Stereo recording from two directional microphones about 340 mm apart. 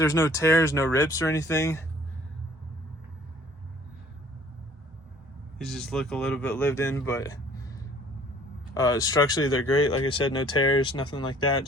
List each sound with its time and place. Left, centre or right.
0.0 s speech: centre
5.5 s speech: centre
8.7 s speech: centre
9.6 s speech: left
10.1 s speech: centre